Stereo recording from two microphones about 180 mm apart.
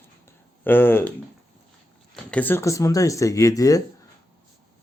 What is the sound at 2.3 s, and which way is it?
Speech, 10° left (ahead or behind).